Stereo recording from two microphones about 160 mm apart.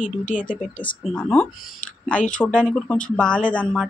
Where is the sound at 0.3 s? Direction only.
55° left (ahead or behind).